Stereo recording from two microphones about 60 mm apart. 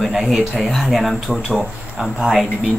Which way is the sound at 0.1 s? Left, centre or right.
Centre.